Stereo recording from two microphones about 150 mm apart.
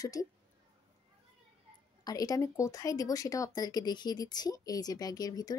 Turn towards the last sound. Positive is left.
turn(degrees=25)  # may be behind; listen again after turning